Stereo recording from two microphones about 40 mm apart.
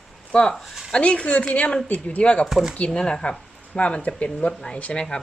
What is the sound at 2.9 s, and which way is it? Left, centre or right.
Speech, centre.